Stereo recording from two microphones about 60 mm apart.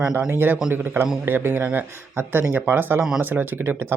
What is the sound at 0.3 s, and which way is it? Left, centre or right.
Speech, right.